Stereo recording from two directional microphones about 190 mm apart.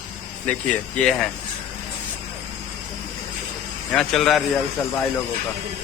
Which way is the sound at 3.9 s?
Centre (ahead or behind).